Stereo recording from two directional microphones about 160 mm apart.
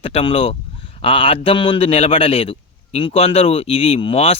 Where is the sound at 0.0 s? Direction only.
35° left (ahead or behind).